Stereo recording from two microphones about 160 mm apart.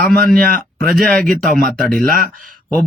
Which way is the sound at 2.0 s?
70° right (ahead or behind).